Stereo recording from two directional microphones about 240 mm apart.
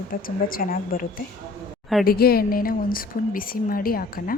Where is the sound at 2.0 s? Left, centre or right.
Left.